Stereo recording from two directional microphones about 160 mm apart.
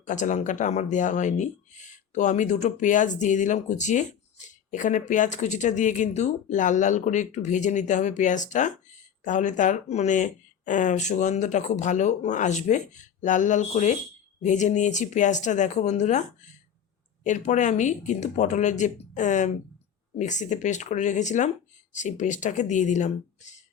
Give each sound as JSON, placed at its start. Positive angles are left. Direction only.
{"t": 0.0, "sound": "speech", "side_deg": 50}